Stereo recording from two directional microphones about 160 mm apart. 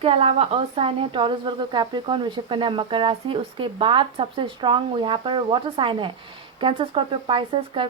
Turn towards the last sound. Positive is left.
turn(degrees=-30)  # may be behind; listen again after turning